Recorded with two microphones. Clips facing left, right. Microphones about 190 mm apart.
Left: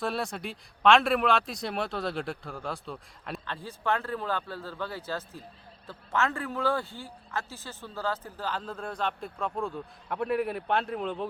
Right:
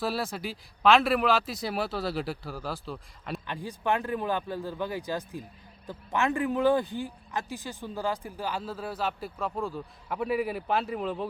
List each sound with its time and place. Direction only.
0.0 s speech: centre (ahead or behind)
3.4 s a man's voice: 15° right (ahead or behind)